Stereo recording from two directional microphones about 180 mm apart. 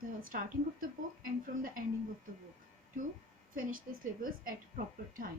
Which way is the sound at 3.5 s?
50° right (ahead or behind).